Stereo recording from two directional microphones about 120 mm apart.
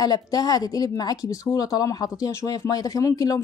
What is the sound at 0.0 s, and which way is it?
Speech, 35° left (ahead or behind).